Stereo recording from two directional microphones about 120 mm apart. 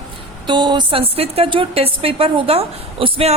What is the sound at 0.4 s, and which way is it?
A woman's voice, 40° right (ahead or behind).